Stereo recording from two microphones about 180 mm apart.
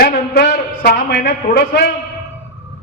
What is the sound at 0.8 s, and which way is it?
A man's voice, 60° left (ahead or behind).